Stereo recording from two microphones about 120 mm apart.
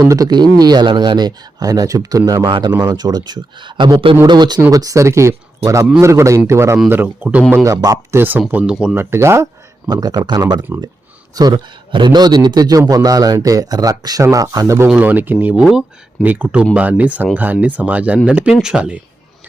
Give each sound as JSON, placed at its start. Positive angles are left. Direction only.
{"t": 0.0, "sound": "speech", "side_deg": -30}
{"t": 7.5, "sound": "speech", "side_deg": -25}
{"t": 8.4, "sound": "speech", "side_deg": -10}
{"t": 9.0, "sound": "speech", "side_deg": -20}
{"t": 10.7, "sound": "speech", "side_deg": -20}
{"t": 11.3, "sound": "speech", "side_deg": -35}
{"t": 14.8, "sound": "speech", "side_deg": -15}